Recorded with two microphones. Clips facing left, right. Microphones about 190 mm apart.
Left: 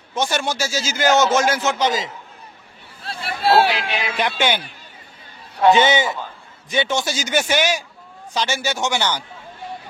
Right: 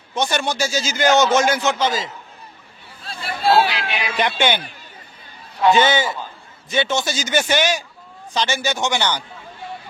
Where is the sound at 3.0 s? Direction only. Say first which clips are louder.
Even; 70° left (ahead or behind).